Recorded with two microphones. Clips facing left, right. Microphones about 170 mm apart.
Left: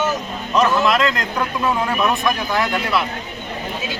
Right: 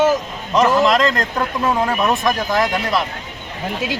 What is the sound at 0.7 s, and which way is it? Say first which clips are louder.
Speech: right 2 dB; 35° right (ahead or behind).